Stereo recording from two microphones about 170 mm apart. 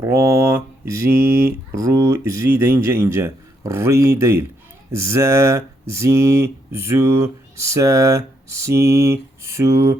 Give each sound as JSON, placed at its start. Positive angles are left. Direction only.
{"t": 0.0, "sound": "speech", "side_deg": -15}